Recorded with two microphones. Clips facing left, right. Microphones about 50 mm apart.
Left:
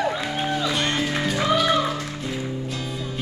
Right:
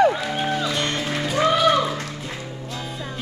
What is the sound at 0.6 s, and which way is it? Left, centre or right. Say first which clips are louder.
Music: even; centre.